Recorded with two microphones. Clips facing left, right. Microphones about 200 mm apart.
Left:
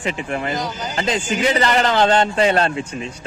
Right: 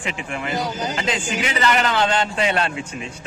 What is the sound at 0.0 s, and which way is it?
A man's voice, 35° left (ahead or behind).